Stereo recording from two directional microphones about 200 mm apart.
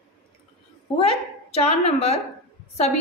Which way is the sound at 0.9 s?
30° left (ahead or behind).